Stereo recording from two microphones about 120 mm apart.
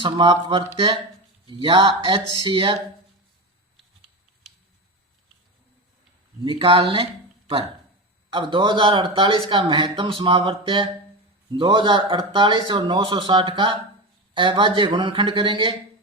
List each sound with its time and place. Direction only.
0.0 s speech: 40° right (ahead or behind)
6.4 s speech: 45° right (ahead or behind)